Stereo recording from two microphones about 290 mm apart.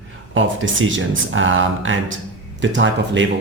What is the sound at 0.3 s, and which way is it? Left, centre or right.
Speech, right.